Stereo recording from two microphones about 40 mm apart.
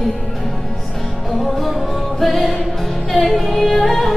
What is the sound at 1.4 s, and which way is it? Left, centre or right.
Music, centre.